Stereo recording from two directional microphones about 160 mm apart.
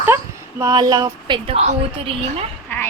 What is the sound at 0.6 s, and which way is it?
Speech, 25° right (ahead or behind).